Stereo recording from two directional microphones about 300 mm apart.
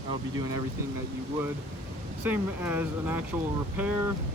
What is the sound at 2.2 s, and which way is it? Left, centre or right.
Speech, centre.